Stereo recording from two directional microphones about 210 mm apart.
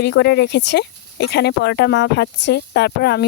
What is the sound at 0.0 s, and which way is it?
Speech, 55° left (ahead or behind).